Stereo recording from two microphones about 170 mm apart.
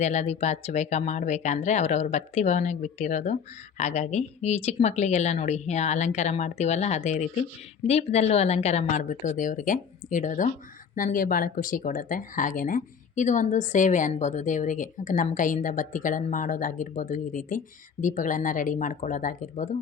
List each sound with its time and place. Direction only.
0.0 s speech: 40° left (ahead or behind)